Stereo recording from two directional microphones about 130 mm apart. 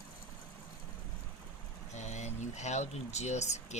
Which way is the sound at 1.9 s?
60° left (ahead or behind).